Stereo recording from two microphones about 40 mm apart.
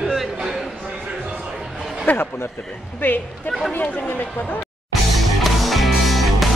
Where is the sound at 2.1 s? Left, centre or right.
Left.